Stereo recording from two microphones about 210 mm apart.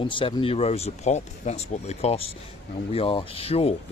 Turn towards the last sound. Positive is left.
turn(degrees=30)  # may be behind; listen again after turning